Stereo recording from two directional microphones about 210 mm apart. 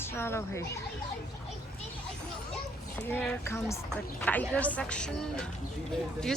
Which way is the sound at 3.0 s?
10° left (ahead or behind).